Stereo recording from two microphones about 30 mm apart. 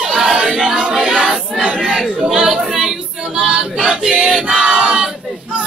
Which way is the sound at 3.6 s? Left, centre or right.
Right.